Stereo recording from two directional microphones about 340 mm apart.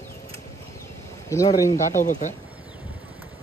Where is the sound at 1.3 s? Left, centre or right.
Centre.